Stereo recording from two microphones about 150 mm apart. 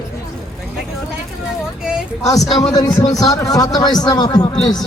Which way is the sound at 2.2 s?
25° left (ahead or behind).